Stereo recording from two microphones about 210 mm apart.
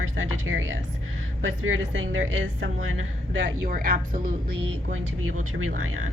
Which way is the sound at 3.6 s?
40° right (ahead or behind).